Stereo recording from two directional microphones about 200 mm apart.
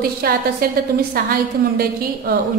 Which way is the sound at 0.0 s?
50° right (ahead or behind).